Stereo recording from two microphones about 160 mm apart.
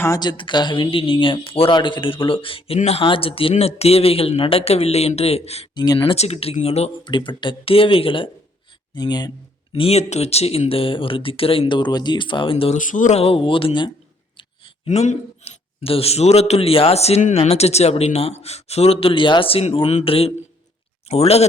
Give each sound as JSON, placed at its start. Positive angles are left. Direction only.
{"t": 0.0, "sound": "speech", "side_deg": 25}
{"t": 5.7, "sound": "speech", "side_deg": 25}
{"t": 9.7, "sound": "speech", "side_deg": 40}
{"t": 12.7, "sound": "speech", "side_deg": 55}
{"t": 14.8, "sound": "speech", "side_deg": 50}